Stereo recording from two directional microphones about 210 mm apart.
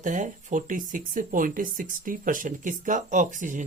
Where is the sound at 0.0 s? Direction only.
35° right (ahead or behind).